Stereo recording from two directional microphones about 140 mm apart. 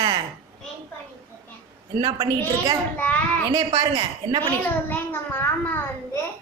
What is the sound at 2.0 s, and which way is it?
Speech, 30° right (ahead or behind).